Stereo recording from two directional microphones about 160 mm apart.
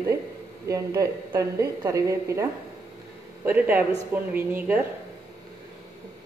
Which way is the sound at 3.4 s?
10° right (ahead or behind).